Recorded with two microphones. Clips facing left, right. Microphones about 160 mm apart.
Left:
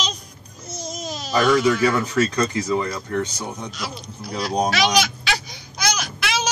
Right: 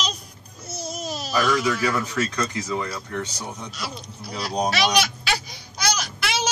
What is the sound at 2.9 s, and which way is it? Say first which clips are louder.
Speech: left 5 dB; 45° left (ahead or behind).